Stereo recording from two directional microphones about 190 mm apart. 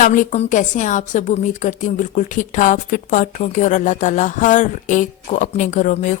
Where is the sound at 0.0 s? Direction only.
45° left (ahead or behind).